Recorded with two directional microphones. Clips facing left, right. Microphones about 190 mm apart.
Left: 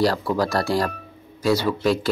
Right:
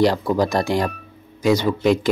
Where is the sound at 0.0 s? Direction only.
20° right (ahead or behind).